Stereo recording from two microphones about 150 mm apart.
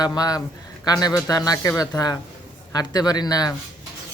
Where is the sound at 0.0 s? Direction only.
25° left (ahead or behind).